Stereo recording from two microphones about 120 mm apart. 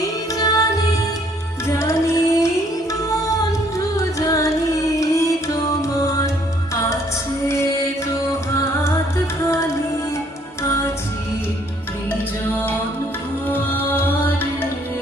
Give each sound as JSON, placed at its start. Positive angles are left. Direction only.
{"t": 0.3, "sound": "music", "side_deg": 30}
{"t": 1.8, "sound": "music", "side_deg": 25}
{"t": 4.2, "sound": "music", "side_deg": 30}
{"t": 10.6, "sound": "music", "side_deg": 25}
{"t": 13.5, "sound": "music", "side_deg": 15}